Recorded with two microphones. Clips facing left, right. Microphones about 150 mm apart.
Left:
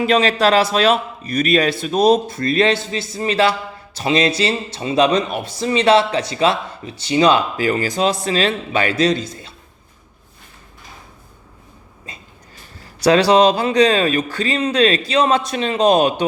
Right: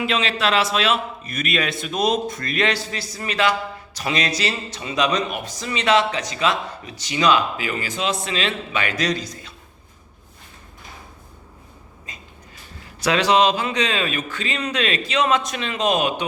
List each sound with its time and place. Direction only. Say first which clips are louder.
0.0 s a man's voice: left 7 dB; 40° left (ahead or behind)
12.1 s train: left 3 dB; 30° left (ahead or behind)
12.8 s a man's voice: left 7 dB; 35° left (ahead or behind)